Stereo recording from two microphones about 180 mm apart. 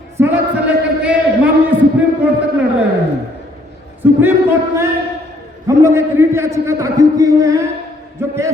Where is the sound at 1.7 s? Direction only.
10° right (ahead or behind).